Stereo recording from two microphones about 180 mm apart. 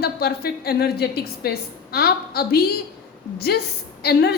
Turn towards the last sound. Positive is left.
turn(degrees=65)  # may be behind; listen again after turning